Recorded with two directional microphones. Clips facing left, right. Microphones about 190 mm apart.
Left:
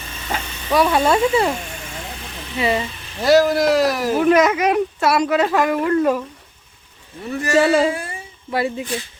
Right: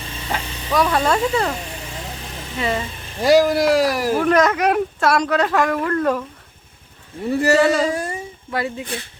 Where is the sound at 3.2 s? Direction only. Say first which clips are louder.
Even; 10° right (ahead or behind).